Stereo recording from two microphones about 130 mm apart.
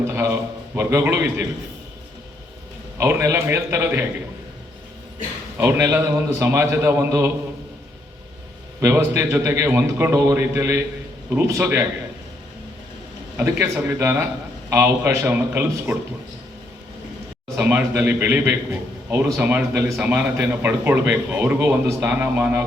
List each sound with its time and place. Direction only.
0.1 s a sound: 15° right (ahead or behind)
0.8 s a man's voice: 20° right (ahead or behind)
3.0 s a man's voice: 20° right (ahead or behind)
5.5 s a man's voice: 20° right (ahead or behind)
8.8 s a man's voice: 20° right (ahead or behind)
13.3 s a man's voice: 15° right (ahead or behind)
17.6 s a man's voice: 15° right (ahead or behind)